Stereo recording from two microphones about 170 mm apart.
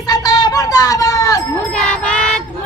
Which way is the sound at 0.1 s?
25° left (ahead or behind).